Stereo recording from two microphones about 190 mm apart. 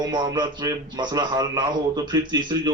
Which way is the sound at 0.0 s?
20° right (ahead or behind).